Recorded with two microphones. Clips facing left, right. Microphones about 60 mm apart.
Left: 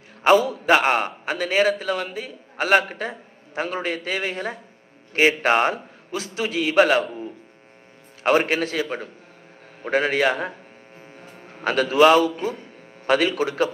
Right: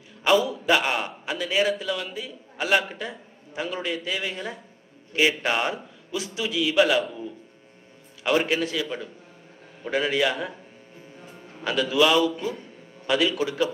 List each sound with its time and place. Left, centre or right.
0.2 s a man's voice: left